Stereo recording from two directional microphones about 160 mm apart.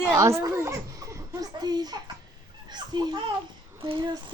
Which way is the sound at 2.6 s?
25° right (ahead or behind).